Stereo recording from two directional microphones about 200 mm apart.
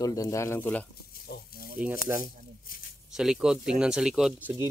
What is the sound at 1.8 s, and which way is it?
Speech, 10° right (ahead or behind).